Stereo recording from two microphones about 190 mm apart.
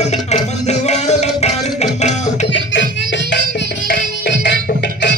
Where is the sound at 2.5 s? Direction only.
75° left (ahead or behind).